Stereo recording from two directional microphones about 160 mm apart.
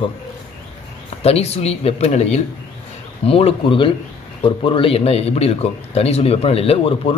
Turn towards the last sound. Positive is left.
turn(degrees=35)  # may be behind; listen again after turning